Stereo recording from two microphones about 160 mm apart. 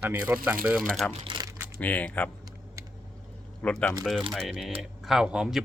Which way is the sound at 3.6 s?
10° left (ahead or behind).